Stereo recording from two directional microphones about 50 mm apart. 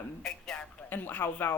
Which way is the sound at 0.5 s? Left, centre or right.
Centre.